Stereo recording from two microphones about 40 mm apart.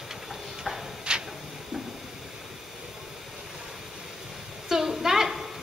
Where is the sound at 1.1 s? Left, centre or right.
Right.